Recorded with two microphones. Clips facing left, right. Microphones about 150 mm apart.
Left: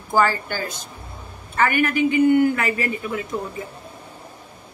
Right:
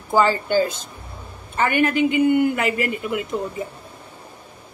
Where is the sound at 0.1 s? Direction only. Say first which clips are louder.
Right 3 dB; 20° right (ahead or behind).